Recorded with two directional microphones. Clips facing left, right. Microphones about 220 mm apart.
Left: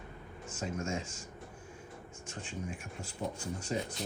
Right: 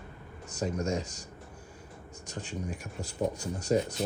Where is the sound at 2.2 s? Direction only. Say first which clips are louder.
Right 4 dB; 40° right (ahead or behind).